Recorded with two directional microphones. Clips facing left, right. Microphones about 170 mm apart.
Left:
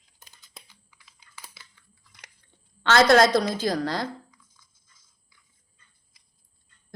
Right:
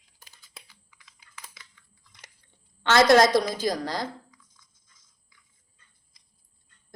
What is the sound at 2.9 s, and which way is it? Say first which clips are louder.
Speech: even; 20° right (ahead or behind).